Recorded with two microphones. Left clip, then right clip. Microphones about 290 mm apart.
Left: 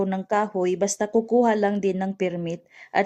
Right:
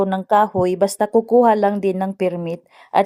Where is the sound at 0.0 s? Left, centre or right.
Right.